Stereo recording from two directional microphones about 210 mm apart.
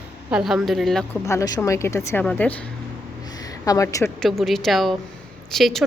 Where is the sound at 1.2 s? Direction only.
15° left (ahead or behind).